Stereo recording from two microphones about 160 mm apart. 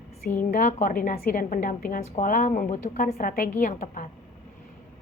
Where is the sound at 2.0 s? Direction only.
50° left (ahead or behind).